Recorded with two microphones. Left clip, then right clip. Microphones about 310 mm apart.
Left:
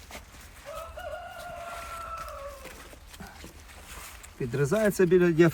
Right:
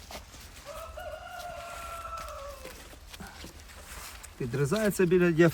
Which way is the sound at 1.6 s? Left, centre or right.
Centre.